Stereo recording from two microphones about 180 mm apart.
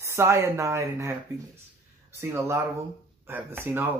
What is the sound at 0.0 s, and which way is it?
Speech, 15° right (ahead or behind).